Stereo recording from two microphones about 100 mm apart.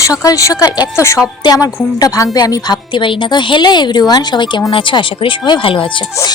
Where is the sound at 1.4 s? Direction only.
45° left (ahead or behind); by 5.8 s 60° left (ahead or behind).